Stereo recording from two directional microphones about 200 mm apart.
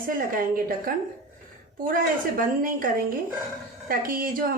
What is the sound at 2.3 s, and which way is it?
Speech, 45° right (ahead or behind).